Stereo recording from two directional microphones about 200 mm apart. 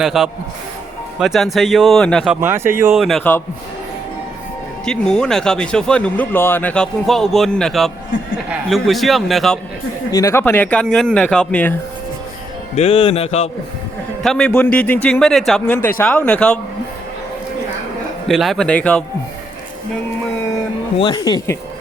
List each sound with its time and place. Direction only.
0.0 s speech: centre (ahead or behind)
2.9 s speech: centre (ahead or behind)
4.9 s speech: 5° left (ahead or behind)
10.1 s a man's voice: 15° left (ahead or behind)
12.7 s a man's voice: 30° left (ahead or behind)
14.2 s speech: 5° left (ahead or behind)
18.3 s speech: centre (ahead or behind)
21.0 s speech: 25° left (ahead or behind)